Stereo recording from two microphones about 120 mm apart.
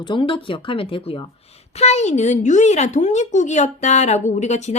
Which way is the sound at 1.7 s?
65° left (ahead or behind).